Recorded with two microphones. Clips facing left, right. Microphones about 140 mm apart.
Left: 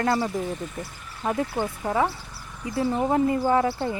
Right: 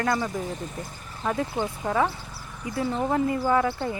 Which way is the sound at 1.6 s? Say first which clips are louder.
Right 1 dB; 15° left (ahead or behind).